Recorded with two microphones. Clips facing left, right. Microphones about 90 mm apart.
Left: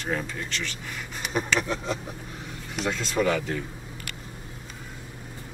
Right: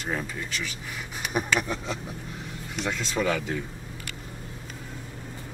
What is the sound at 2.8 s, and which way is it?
Speech, centre (ahead or behind).